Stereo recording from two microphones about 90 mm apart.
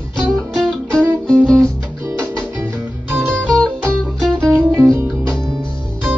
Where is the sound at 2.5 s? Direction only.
15° right (ahead or behind).